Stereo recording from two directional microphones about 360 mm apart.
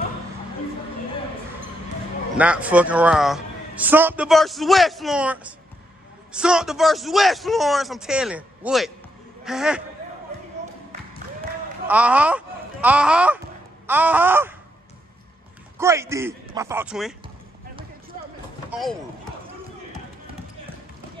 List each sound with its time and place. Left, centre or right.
2.3 s a man's voice: centre
11.9 s a man's voice: centre
15.8 s a man's voice: centre
18.7 s speech: centre